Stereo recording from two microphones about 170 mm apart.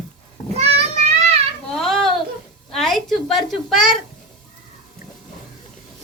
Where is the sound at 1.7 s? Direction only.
5° left (ahead or behind).